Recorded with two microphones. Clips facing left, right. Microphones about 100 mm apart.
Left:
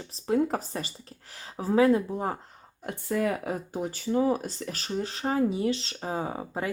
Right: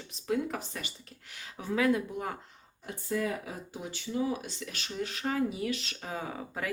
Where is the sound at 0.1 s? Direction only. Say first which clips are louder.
Left 6 dB; 35° left (ahead or behind).